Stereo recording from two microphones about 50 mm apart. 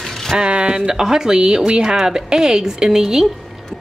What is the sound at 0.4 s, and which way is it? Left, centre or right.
A woman's voice, right.